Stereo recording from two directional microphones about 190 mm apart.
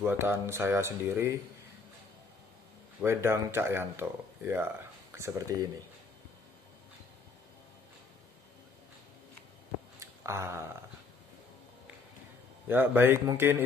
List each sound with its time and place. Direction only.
0.0 s speech: 10° right (ahead or behind)
3.0 s speech: 15° right (ahead or behind)
9.9 s a sound: 15° right (ahead or behind)
12.6 s speech: 10° right (ahead or behind)